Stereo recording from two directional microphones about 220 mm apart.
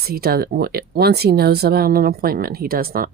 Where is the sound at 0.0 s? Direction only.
45° right (ahead or behind).